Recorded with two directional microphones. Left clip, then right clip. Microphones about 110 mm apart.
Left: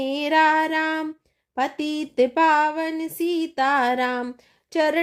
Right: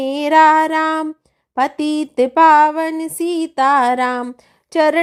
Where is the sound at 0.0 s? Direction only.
35° right (ahead or behind).